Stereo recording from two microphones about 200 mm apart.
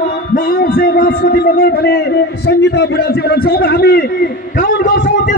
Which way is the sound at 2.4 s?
55° left (ahead or behind).